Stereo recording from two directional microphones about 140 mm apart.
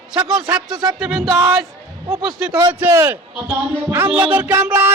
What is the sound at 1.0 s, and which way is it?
Music, 5° right (ahead or behind).